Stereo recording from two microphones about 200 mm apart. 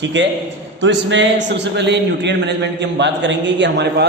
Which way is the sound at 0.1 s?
65° right (ahead or behind).